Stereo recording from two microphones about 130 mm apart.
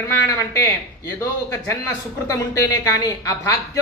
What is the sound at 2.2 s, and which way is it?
Speech, 25° left (ahead or behind).